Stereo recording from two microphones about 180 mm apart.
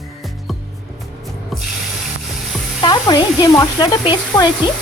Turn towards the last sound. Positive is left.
turn(degrees=25)  # may be behind; listen again after turning